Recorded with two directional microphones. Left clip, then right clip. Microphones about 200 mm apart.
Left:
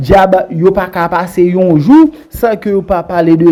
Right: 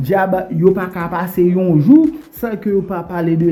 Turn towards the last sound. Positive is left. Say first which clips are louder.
# left 10 dB
turn(degrees=15)  # may be behind; listen again after turning